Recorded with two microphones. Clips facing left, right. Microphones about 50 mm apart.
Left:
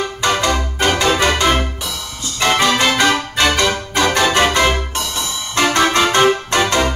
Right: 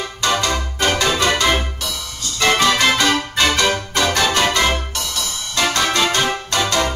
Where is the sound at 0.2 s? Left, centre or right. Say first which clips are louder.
Left 2 dB; centre.